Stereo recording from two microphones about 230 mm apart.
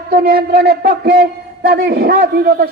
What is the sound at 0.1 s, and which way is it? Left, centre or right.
Speech, right.